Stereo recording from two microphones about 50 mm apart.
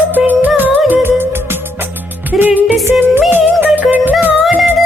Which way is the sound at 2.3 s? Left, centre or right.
Right.